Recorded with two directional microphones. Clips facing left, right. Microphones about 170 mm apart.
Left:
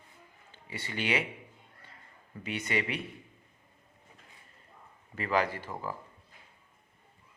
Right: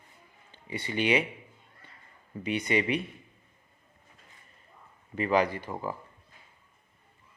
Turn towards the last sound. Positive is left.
turn(degrees=-20)  # may be behind; listen again after turning